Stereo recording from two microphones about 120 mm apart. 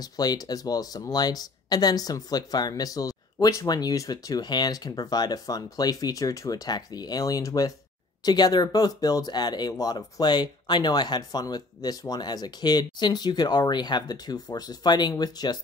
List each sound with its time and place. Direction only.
0.0 s speech: 35° left (ahead or behind)